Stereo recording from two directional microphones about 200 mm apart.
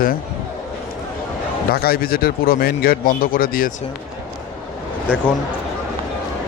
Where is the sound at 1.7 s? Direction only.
50° left (ahead or behind).